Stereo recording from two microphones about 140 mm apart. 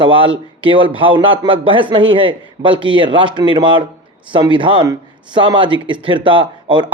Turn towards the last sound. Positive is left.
turn(degrees=-35)  # may be behind; listen again after turning